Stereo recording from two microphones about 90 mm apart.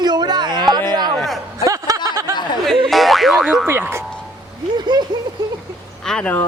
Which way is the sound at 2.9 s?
Centre (ahead or behind).